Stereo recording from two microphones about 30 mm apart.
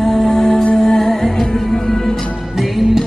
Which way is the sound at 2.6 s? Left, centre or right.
Centre.